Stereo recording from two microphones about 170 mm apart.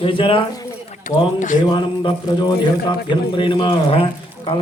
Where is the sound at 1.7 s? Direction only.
25° left (ahead or behind).